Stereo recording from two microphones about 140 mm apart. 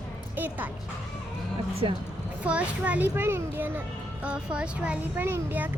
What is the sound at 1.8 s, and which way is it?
Speech, 35° right (ahead or behind).